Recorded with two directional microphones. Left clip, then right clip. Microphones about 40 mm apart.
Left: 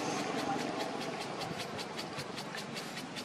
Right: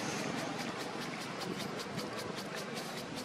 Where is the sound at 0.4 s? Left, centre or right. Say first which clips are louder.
Left 4 dB; centre.